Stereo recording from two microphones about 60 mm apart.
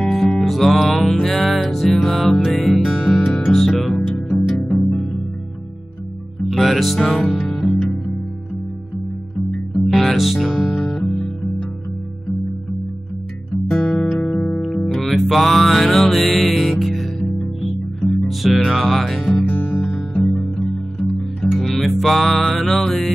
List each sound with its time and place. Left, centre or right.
0.1 s music: centre
6.5 s music: centre
9.5 s music: centre
13.9 s music: centre
15.0 s music: centre
19.4 s music: left
20.0 s music: centre